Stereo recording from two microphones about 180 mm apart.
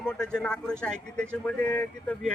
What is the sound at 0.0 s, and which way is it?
Speech, 5° left (ahead or behind).